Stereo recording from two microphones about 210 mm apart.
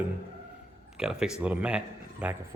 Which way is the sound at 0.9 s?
5° right (ahead or behind).